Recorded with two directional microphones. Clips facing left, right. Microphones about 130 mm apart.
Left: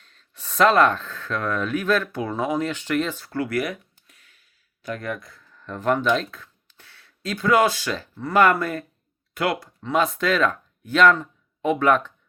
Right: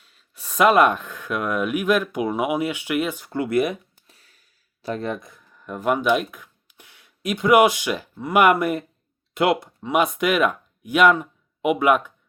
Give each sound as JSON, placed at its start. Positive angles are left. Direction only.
{"t": 0.0, "sound": "speech", "side_deg": -10}